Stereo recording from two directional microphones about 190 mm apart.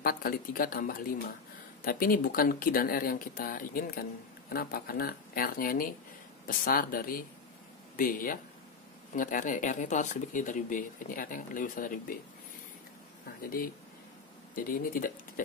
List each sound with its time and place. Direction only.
0.0 s speech: 50° left (ahead or behind)
13.4 s speech: 50° left (ahead or behind)